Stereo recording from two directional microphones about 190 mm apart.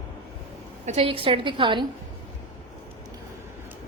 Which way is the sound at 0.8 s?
30° right (ahead or behind).